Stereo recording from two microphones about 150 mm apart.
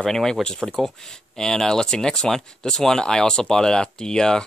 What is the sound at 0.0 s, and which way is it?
Speech, 5° left (ahead or behind).